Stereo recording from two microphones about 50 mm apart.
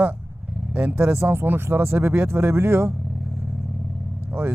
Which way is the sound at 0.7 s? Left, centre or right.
Right.